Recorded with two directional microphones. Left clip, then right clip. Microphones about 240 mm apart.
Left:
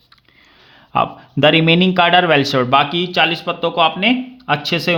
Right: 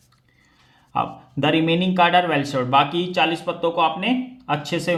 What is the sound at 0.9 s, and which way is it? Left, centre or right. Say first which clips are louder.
Speech: left 7 dB; left.